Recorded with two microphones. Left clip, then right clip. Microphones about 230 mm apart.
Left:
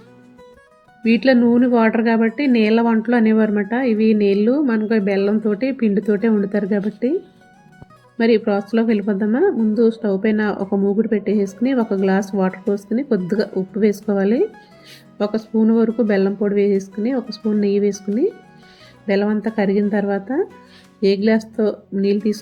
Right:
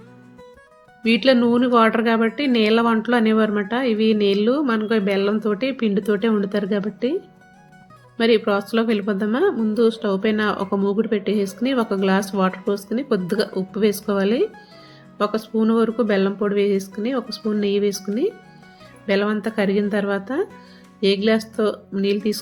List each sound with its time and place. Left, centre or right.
1.2 s speech: centre
3.1 s speech: right
3.8 s music: right
4.1 s speech: centre
8.4 s speech: centre
21.0 s music: right
21.3 s speech: centre